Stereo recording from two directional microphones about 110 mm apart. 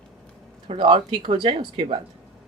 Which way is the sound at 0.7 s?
55° right (ahead or behind).